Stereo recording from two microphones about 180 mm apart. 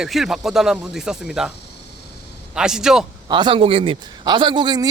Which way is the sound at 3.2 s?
25° right (ahead or behind).